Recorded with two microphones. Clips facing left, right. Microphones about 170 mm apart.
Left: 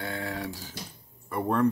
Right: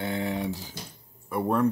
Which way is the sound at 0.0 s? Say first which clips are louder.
Right 4 dB; 20° right (ahead or behind).